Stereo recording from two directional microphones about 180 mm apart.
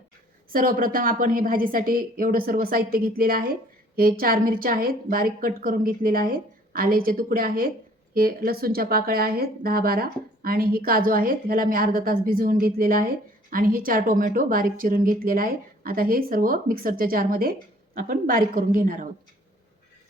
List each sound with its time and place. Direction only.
0.5 s speech: 50° right (ahead or behind)